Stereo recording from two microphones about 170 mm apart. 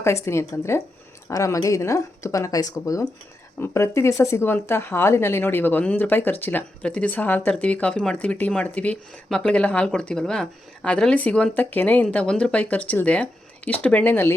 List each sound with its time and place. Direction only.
0.0 s a woman's voice: 15° left (ahead or behind)